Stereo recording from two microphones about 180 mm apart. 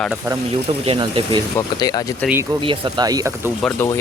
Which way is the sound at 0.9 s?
30° right (ahead or behind).